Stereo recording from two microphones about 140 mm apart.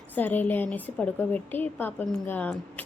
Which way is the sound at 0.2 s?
15° left (ahead or behind).